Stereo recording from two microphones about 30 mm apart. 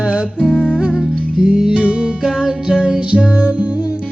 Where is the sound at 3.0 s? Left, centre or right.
Right.